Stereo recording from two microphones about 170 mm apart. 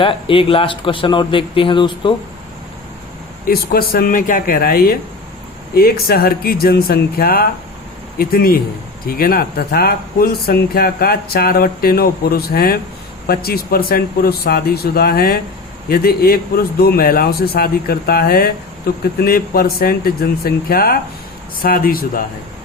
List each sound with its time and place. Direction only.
0.0 s speech: 30° left (ahead or behind)
3.4 s speech: 60° left (ahead or behind)